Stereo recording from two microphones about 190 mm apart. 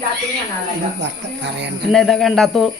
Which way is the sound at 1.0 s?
65° right (ahead or behind).